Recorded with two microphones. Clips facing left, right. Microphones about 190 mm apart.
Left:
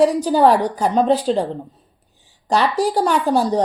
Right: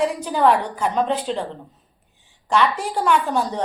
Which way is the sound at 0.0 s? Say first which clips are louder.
Left 5 dB; 35° left (ahead or behind).